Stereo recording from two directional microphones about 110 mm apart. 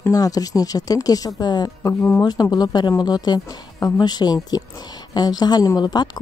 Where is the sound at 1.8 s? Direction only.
20° left (ahead or behind).